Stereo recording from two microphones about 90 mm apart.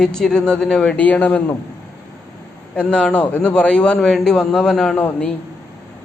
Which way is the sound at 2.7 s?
10° left (ahead or behind).